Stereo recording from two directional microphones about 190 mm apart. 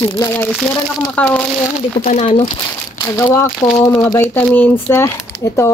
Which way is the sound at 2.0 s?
35° left (ahead or behind).